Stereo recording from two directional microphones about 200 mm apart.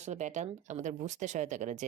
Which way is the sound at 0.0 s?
35° right (ahead or behind).